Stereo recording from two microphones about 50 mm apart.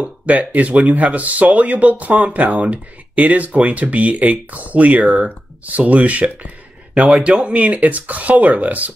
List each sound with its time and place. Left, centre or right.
0.0 s speech: right